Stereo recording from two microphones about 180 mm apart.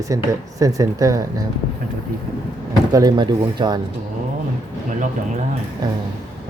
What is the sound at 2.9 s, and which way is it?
Speech, 25° right (ahead or behind).